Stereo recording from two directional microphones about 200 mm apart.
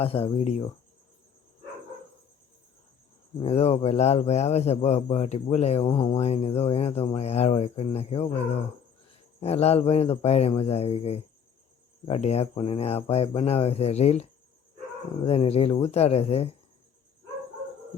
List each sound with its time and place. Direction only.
0.0 s speech: 30° left (ahead or behind)
3.3 s speech: 30° left (ahead or behind)
9.4 s speech: 30° left (ahead or behind)